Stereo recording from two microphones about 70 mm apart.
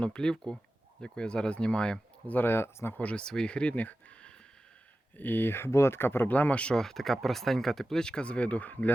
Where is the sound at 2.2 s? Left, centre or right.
Left.